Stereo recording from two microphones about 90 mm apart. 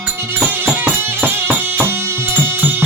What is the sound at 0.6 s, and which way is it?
Music, 25° right (ahead or behind).